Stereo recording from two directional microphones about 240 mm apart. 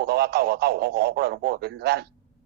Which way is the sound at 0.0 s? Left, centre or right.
Right.